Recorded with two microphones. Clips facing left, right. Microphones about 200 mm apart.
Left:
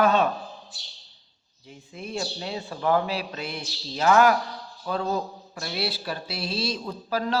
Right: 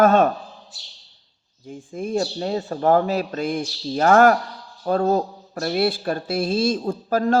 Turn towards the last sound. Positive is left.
turn(degrees=-50)  # may be behind; listen again after turning